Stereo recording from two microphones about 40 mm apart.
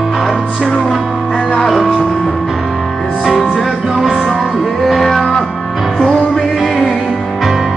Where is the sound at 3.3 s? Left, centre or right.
Centre.